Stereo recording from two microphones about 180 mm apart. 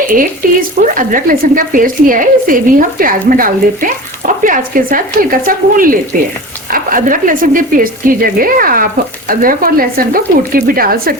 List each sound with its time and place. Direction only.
0.0 s speech: 50° right (ahead or behind)